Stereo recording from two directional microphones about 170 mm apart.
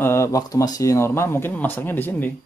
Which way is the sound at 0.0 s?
15° left (ahead or behind).